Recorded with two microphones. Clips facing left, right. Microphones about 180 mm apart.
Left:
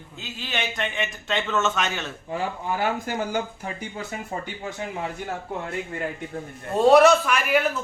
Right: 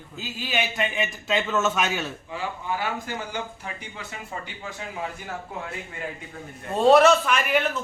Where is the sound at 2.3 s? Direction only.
45° left (ahead or behind).